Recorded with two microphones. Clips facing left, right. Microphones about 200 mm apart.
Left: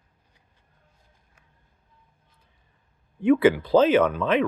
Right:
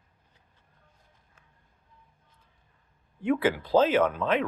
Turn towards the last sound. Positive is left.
turn(degrees=75)  # may be behind; listen again after turning